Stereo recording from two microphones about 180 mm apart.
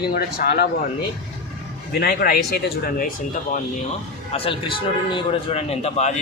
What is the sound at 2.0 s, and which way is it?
Speech, 60° left (ahead or behind).